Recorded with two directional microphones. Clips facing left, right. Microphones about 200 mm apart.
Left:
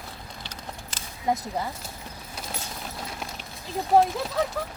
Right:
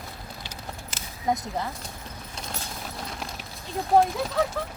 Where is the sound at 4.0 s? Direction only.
Centre (ahead or behind).